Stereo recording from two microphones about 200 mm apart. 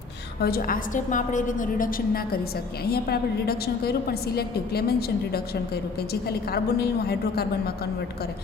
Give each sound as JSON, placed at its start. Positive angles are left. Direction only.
{"t": 0.4, "sound": "a woman's voice", "side_deg": 50}